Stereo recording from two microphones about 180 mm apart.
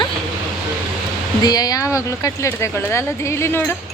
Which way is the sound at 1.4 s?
20° left (ahead or behind).